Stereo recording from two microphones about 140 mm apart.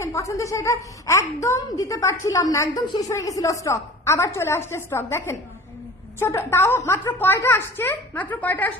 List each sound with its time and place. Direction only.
0.0 s a woman's voice: 20° left (ahead or behind)